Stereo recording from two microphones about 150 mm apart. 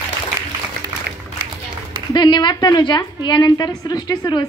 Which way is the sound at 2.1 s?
30° left (ahead or behind).